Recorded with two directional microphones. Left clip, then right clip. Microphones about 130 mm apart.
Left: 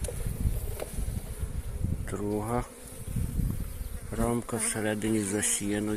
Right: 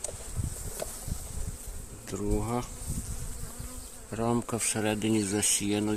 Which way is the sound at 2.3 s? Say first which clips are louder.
Left 1 dB; 40° right (ahead or behind).